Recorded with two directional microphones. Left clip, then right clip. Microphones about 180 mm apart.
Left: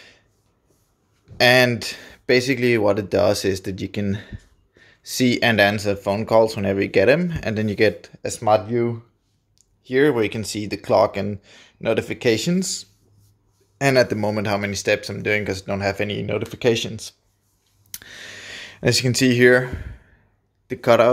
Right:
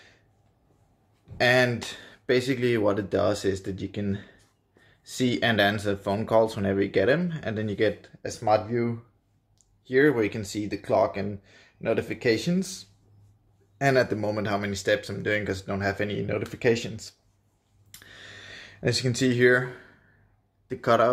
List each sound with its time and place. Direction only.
1.4 s speech: 40° left (ahead or behind)
17.9 s a sound: 45° left (ahead or behind)
20.6 s speech: 30° left (ahead or behind)